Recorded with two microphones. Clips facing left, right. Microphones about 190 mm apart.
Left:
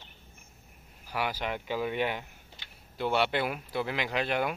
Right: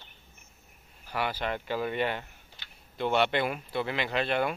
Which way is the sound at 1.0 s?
10° left (ahead or behind).